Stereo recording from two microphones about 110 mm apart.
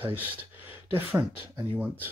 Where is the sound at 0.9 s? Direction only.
15° right (ahead or behind).